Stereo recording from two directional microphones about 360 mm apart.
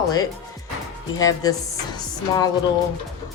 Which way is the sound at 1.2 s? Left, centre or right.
Centre.